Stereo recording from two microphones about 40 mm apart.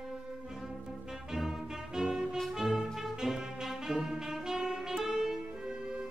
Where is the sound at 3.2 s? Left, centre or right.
Centre.